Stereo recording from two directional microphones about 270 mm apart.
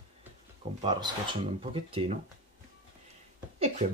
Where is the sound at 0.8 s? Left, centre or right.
Centre.